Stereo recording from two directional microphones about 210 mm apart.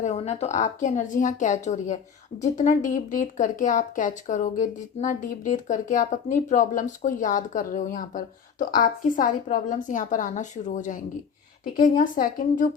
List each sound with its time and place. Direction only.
0.0 s speech: 30° left (ahead or behind)